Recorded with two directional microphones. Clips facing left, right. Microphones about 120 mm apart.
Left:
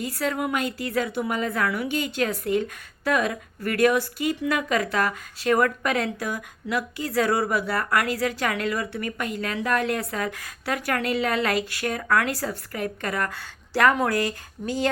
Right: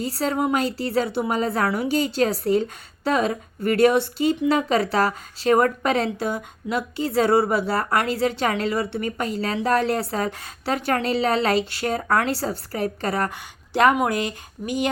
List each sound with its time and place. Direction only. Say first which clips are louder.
0.0 s a woman's voice: right 3 dB; 30° right (ahead or behind)
13.3 s speech: right 2 dB; 20° right (ahead or behind)